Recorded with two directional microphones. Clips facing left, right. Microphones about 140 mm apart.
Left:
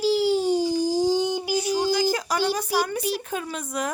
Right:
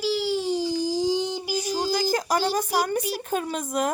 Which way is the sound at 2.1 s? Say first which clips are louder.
Right 1 dB; 45° right (ahead or behind).